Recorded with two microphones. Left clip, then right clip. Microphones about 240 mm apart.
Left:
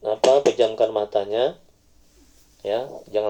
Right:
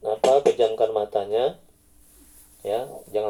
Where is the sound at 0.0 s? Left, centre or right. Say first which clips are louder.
Left 2 dB; left.